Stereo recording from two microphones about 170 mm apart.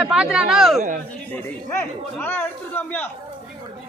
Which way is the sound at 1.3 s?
10° left (ahead or behind).